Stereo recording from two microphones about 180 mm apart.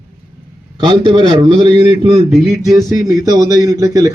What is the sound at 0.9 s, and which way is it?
Speech, 25° right (ahead or behind).